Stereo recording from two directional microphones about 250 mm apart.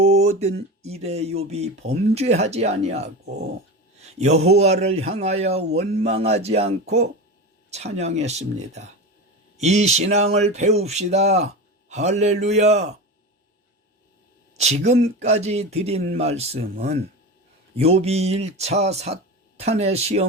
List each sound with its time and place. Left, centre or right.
0.1 s a sound: right
0.9 s speech: right
14.6 s speech: right